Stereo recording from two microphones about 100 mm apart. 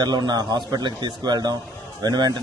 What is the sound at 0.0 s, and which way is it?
A man's voice, 50° right (ahead or behind).